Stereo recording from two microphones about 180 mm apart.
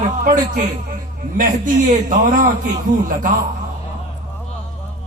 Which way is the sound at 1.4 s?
45° right (ahead or behind).